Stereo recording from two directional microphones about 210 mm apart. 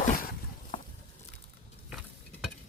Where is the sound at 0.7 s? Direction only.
35° left (ahead or behind).